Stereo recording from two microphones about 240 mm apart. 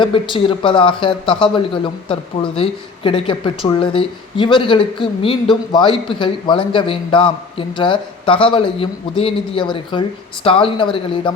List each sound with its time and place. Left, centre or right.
0.0 s speech: left